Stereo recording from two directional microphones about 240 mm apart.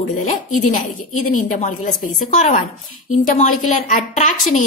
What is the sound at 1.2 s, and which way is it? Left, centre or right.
A woman's voice, left.